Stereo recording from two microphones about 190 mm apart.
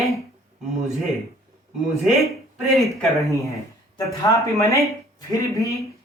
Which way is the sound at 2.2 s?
Centre (ahead or behind).